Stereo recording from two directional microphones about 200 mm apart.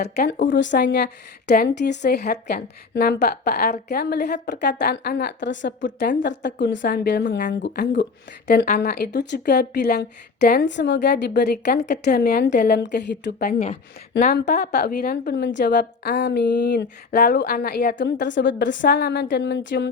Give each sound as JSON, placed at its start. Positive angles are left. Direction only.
{"t": 0.0, "sound": "a woman's voice", "side_deg": 55}
{"t": 8.6, "sound": "a woman's voice", "side_deg": 50}